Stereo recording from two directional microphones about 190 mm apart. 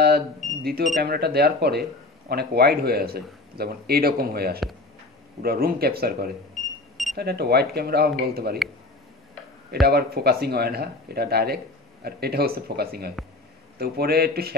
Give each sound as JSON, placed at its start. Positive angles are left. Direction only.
{"t": 0.0, "sound": "a sound", "side_deg": -55}
{"t": 0.9, "sound": "speech", "side_deg": -55}
{"t": 9.7, "sound": "speech", "side_deg": -55}